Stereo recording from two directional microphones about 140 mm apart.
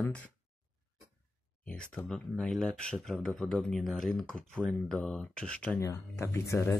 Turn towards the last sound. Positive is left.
turn(degrees=20)  # may be behind; listen again after turning